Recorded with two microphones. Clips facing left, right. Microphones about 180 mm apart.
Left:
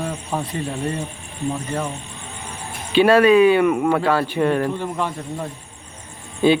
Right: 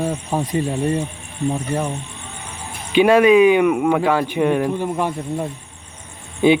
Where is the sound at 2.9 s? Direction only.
15° right (ahead or behind).